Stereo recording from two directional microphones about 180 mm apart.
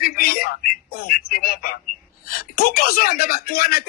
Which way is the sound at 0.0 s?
55° left (ahead or behind).